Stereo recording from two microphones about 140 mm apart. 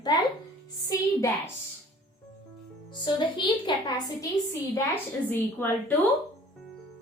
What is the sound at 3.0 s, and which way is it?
A woman's voice, 35° left (ahead or behind).